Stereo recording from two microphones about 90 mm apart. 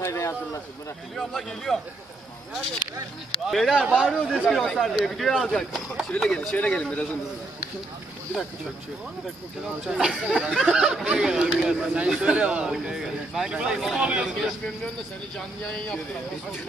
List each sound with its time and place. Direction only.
0.0 s a sound: 30° left (ahead or behind)
1.1 s speech: 5° left (ahead or behind)
3.4 s speech: centre (ahead or behind)
9.8 s speech: 5° right (ahead or behind)
15.3 s speech: 10° left (ahead or behind)